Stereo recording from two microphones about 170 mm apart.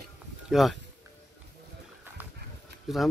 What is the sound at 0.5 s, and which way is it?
Speech, centre (ahead or behind).